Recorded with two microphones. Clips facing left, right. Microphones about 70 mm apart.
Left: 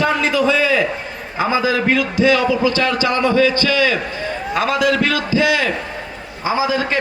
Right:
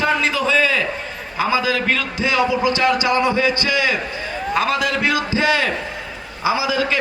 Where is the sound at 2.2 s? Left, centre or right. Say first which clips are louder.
Left 2 dB; centre.